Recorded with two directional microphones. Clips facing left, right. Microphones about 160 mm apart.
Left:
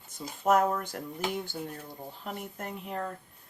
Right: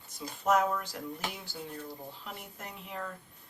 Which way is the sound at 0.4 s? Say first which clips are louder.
Left 3 dB; 50° left (ahead or behind).